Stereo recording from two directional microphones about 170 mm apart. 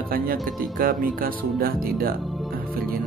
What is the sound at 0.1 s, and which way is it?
Speech, 60° right (ahead or behind).